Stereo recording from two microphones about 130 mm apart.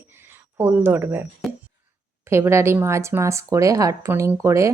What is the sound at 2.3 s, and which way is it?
A woman's voice, 20° right (ahead or behind).